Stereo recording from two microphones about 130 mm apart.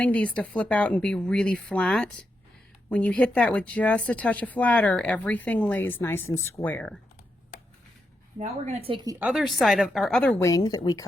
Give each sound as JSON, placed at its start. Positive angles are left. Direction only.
{"t": 0.0, "sound": "speech", "side_deg": 10}
{"t": 8.4, "sound": "a woman's voice", "side_deg": -60}
{"t": 8.9, "sound": "speech", "side_deg": -35}
{"t": 9.3, "sound": "a woman's voice", "side_deg": 0}
{"t": 10.4, "sound": "speech", "side_deg": 30}